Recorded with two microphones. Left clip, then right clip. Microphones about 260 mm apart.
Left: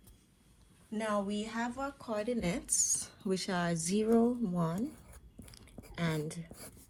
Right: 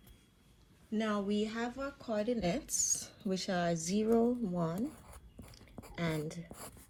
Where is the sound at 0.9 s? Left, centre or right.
Centre.